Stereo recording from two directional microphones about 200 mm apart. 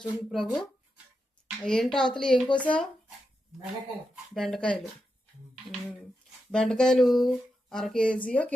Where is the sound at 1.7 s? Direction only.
5° left (ahead or behind).